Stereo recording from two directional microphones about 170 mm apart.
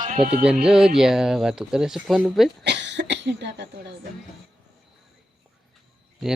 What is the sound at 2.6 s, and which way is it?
Cough, 90° right.